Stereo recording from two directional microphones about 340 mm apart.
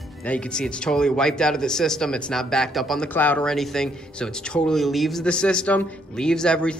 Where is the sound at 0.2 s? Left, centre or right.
Centre.